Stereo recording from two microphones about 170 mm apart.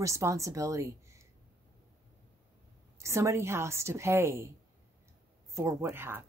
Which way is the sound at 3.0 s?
15° right (ahead or behind).